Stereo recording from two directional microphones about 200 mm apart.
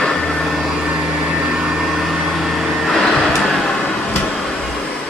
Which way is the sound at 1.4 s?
5° right (ahead or behind).